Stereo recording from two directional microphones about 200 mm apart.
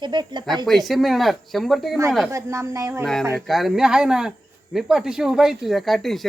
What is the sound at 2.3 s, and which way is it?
Speech, 15° right (ahead or behind).